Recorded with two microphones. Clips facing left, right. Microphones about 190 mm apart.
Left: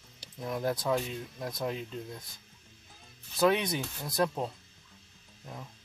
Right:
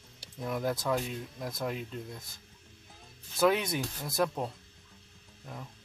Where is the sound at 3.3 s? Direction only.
5° right (ahead or behind).